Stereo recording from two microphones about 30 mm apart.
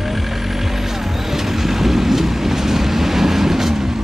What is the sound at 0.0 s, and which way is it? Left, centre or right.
Vehicle, centre.